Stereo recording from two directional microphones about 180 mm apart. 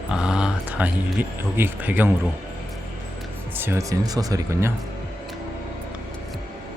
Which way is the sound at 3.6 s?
15° right (ahead or behind).